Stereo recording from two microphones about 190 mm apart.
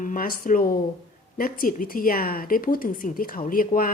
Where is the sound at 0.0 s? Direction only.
45° left (ahead or behind).